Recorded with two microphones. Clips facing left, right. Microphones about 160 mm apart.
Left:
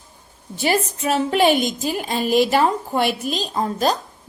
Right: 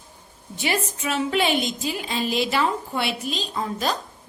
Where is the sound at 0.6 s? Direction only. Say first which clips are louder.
Left 5 dB; 40° left (ahead or behind).